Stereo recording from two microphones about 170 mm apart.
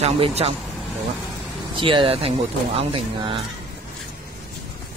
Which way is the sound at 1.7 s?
30° right (ahead or behind).